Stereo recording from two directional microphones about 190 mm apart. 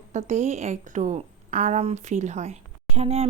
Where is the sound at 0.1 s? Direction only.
40° right (ahead or behind).